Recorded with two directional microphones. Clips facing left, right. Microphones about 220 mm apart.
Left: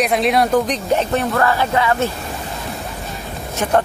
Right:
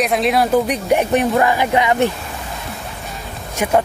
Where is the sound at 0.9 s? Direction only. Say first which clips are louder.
Right 5 dB; 15° right (ahead or behind).